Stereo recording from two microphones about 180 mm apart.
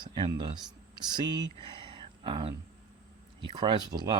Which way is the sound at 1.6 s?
30° right (ahead or behind).